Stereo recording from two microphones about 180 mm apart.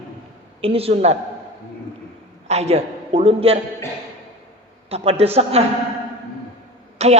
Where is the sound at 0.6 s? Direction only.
30° right (ahead or behind).